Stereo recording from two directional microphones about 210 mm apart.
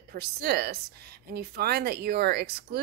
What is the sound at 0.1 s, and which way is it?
Speech, 50° right (ahead or behind).